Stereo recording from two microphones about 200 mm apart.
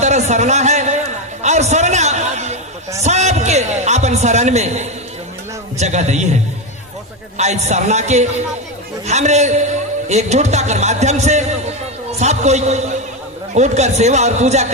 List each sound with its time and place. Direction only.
0.0 s a man's voice: 35° right (ahead or behind)